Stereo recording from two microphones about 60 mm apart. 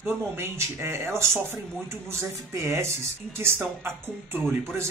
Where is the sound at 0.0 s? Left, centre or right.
Right.